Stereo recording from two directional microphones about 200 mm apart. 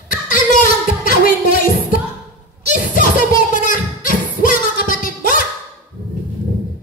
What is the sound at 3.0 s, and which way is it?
Music, 40° left (ahead or behind).